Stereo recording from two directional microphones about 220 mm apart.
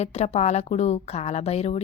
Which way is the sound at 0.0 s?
30° left (ahead or behind).